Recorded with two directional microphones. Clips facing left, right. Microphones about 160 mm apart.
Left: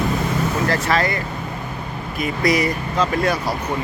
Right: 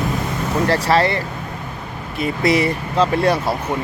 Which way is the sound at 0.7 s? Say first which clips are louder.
Right 7 dB; 30° right (ahead or behind).